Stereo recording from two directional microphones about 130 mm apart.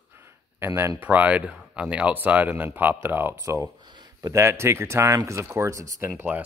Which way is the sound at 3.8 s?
35° right (ahead or behind).